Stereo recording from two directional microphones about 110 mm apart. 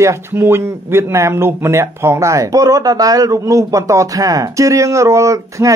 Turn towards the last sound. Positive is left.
turn(degrees=-30)  # may be behind; listen again after turning